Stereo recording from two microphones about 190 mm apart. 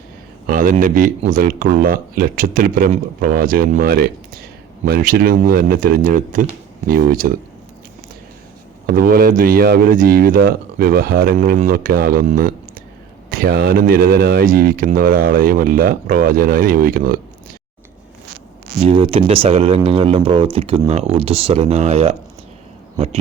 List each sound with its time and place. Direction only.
0.4 s speech: 45° right (ahead or behind)
8.9 s speech: 50° right (ahead or behind)
18.8 s speech: 30° right (ahead or behind)